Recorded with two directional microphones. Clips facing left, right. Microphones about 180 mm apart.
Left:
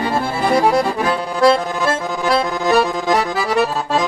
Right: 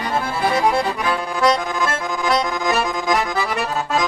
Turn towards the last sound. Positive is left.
turn(degrees=35)  # may be behind; listen again after turning